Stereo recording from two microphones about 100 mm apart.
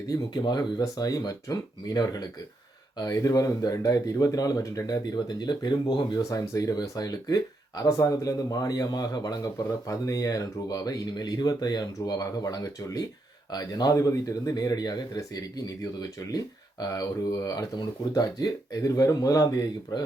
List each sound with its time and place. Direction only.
0.1 s speech: 40° left (ahead or behind)
6.2 s speech: 30° left (ahead or behind)